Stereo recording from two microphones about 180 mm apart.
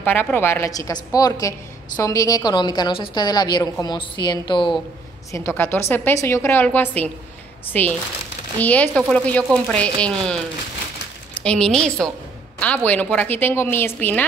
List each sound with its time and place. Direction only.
0.0 s a woman's voice: 10° left (ahead or behind); by 4.7 s 25° left (ahead or behind)
5.3 s a woman's voice: 15° left (ahead or behind)
11.4 s a woman's voice: 5° left (ahead or behind)